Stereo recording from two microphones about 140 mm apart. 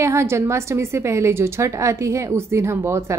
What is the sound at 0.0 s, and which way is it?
A woman's voice, 20° right (ahead or behind).